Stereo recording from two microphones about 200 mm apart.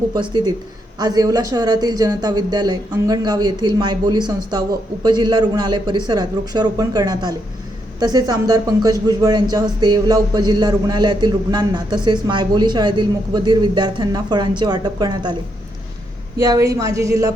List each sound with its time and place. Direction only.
0.1 s speech: 20° right (ahead or behind)
16.4 s a woman's voice: 15° right (ahead or behind)